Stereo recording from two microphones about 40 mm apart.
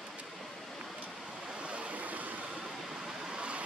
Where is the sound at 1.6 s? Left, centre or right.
Right.